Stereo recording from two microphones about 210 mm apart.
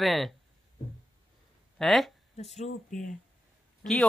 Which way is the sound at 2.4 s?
30° left (ahead or behind).